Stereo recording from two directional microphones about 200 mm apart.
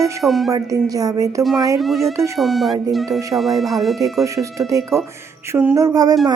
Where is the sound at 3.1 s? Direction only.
15° right (ahead or behind).